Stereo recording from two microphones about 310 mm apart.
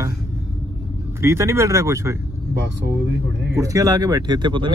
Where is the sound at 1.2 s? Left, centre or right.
Centre.